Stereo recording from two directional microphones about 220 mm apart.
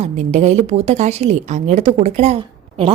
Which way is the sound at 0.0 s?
30° right (ahead or behind).